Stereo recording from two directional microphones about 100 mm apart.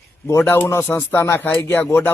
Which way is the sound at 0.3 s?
25° left (ahead or behind).